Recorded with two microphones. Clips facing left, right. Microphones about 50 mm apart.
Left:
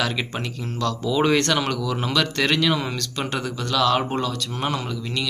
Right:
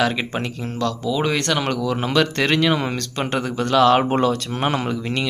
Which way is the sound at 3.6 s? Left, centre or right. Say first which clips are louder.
Right 6 dB; right.